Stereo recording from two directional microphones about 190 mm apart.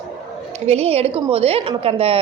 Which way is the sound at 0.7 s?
30° right (ahead or behind).